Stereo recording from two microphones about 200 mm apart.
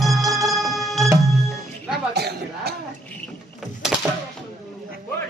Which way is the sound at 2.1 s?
55° right (ahead or behind).